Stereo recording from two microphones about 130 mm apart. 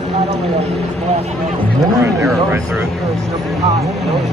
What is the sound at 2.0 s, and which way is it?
Speech, 20° right (ahead or behind).